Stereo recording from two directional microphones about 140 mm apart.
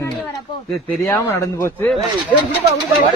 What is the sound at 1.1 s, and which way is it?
Speech, 20° left (ahead or behind).